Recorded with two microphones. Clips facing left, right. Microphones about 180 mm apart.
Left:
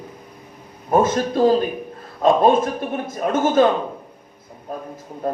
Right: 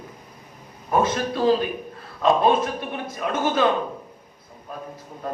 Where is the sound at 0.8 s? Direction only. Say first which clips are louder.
Left 4 dB; 45° left (ahead or behind).